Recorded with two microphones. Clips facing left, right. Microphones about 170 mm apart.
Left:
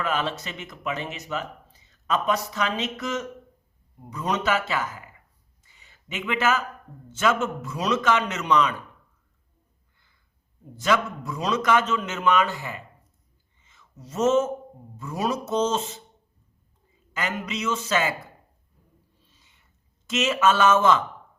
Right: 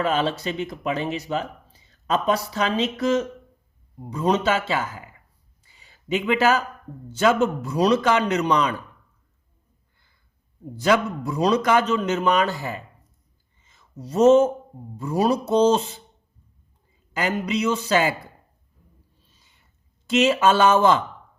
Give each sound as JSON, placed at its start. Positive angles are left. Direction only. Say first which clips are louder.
{"t": 0.0, "sound": "speech", "louder": "right 5 dB", "side_deg": -30}
{"t": 5.6, "sound": "a sound", "louder": "right 14 dB", "side_deg": -35}
{"t": 7.1, "sound": "speech", "louder": "right 5 dB", "side_deg": -35}
{"t": 10.8, "sound": "speech", "louder": "right 4 dB", "side_deg": -35}
{"t": 17.2, "sound": "speech", "louder": "right 6 dB", "side_deg": -35}
{"t": 20.1, "sound": "speech", "louder": "right 4 dB", "side_deg": -30}